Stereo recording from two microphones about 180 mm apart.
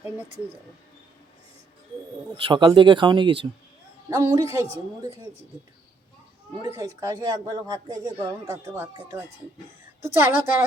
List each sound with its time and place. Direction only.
2.3 s a woman's voice: 25° right (ahead or behind)
6.6 s a woman's voice: 20° right (ahead or behind)